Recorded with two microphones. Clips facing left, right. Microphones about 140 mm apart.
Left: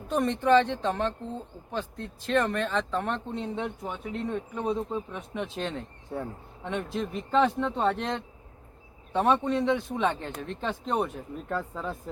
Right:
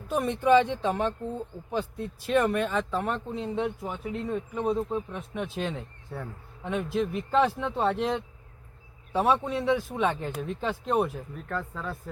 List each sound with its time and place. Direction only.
0.1 s speech: 5° right (ahead or behind)
6.1 s a man's voice: 20° left (ahead or behind)
6.9 s speech: 5° right (ahead or behind)
11.3 s speech: 15° left (ahead or behind)